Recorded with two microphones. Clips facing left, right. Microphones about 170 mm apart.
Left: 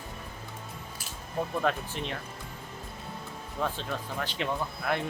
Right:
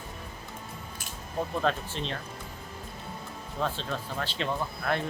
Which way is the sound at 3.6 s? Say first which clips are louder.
Right 1 dB; 15° left (ahead or behind).